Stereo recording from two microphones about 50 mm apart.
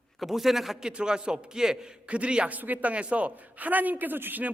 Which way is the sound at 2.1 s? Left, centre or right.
Right.